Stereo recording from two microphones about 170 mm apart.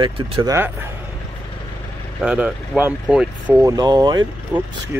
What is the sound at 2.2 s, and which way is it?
Speech, 5° right (ahead or behind).